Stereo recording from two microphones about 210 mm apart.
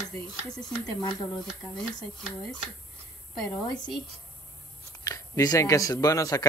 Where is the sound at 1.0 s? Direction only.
20° left (ahead or behind).